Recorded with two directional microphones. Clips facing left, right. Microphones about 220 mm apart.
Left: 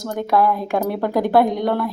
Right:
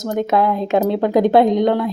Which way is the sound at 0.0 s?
20° right (ahead or behind).